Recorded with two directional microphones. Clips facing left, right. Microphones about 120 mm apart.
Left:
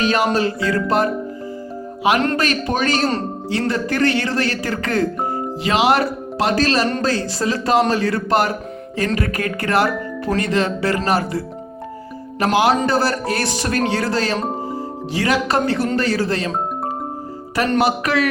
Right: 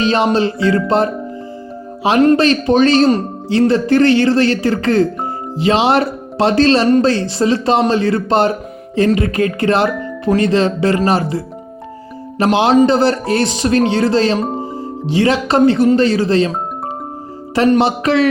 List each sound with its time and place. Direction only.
0.0 s speech: 25° right (ahead or behind)
2.3 s speech: 25° right (ahead or behind)
17.7 s speech: 25° right (ahead or behind)